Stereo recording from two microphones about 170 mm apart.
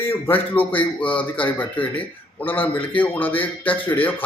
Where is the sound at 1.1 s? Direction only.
30° left (ahead or behind).